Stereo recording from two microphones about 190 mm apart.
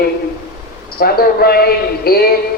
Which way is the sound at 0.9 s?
55° left (ahead or behind).